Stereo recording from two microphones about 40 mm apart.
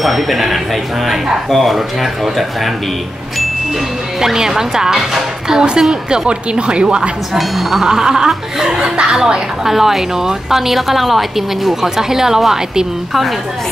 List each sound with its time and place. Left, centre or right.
0.0 s speech: centre
4.2 s a woman's voice: centre
7.3 s speech: centre
7.8 s a woman's voice: centre